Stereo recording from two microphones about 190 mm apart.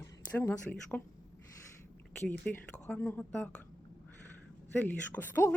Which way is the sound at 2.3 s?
10° left (ahead or behind).